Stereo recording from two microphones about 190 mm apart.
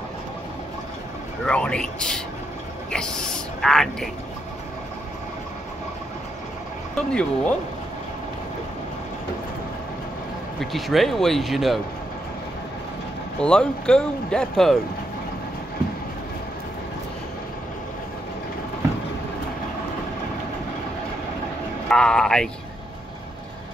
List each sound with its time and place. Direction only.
1.4 s speech: 5° left (ahead or behind)
7.0 s speech: 5° left (ahead or behind)
10.6 s speech: centre (ahead or behind)
13.4 s speech: 5° left (ahead or behind)
21.8 s a sound: 5° left (ahead or behind)